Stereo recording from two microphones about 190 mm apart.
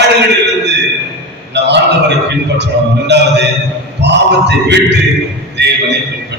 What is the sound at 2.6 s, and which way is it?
A man's voice, 65° right (ahead or behind).